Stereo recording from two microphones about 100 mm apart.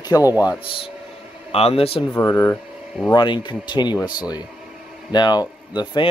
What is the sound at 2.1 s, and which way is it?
Speech, 25° left (ahead or behind).